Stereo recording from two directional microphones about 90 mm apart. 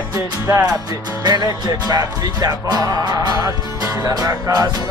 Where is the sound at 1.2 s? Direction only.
50° right (ahead or behind).